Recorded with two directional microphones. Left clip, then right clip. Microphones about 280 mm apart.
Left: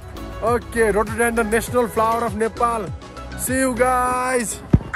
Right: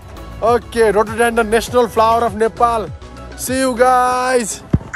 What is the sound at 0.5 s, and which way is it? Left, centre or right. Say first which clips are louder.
Speech: right 5 dB; right.